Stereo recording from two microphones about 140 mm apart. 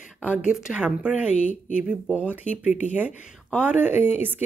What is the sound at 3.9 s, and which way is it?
Speech, 55° left (ahead or behind).